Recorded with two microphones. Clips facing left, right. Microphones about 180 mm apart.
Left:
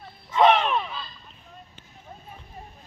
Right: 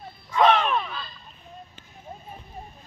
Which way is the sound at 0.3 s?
20° left (ahead or behind).